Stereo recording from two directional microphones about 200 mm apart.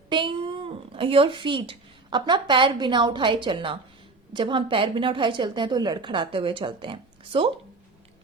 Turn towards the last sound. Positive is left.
turn(degrees=-25)  # may be behind; listen again after turning